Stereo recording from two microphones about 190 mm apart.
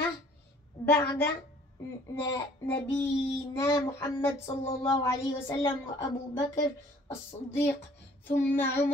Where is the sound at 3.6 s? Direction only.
15° left (ahead or behind).